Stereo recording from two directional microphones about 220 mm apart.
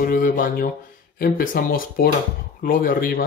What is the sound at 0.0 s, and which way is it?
Speech, 40° left (ahead or behind).